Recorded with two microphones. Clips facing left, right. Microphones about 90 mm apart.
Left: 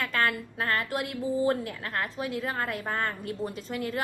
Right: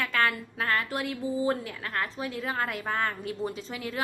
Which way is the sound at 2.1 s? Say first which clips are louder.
Left 1 dB; 5° left (ahead or behind).